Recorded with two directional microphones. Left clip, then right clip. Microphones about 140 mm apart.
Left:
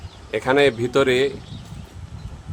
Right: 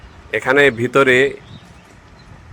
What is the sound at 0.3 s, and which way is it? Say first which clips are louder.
Speech: right 4 dB; 15° right (ahead or behind).